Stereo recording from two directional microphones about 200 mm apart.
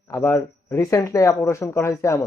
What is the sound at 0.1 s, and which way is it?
Speech, 15° left (ahead or behind).